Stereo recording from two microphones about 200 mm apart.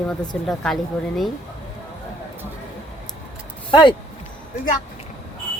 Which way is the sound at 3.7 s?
25° left (ahead or behind).